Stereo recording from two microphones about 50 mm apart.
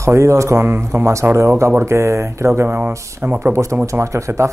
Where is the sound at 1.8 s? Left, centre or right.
Right.